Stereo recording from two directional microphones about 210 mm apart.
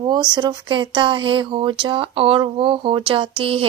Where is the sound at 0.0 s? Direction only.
20° right (ahead or behind).